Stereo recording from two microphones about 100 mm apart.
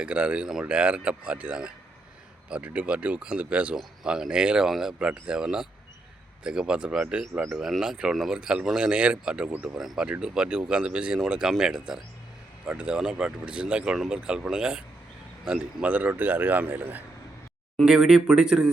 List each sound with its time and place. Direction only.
0.0 s speech: 10° right (ahead or behind)
17.8 s speech: 5° right (ahead or behind)